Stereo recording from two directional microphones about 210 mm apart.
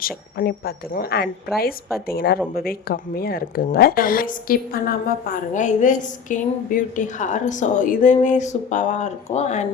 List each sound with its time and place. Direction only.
0.0 s a woman's voice: 45° left (ahead or behind)